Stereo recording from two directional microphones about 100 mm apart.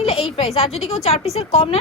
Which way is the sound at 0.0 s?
75° left (ahead or behind).